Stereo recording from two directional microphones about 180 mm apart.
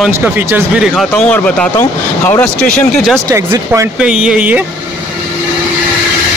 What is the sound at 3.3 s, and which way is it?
Speech, 20° right (ahead or behind).